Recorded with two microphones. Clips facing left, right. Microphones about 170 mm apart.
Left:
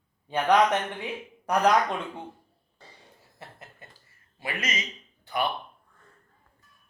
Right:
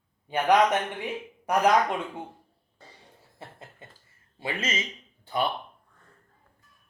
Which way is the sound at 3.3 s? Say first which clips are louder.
Right 2 dB; 25° right (ahead or behind).